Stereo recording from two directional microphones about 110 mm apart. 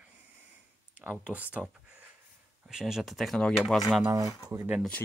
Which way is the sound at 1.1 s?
10° right (ahead or behind).